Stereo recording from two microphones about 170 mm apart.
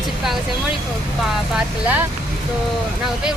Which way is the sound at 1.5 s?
10° right (ahead or behind).